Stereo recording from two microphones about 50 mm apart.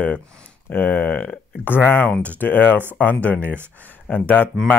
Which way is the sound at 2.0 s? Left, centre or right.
Left.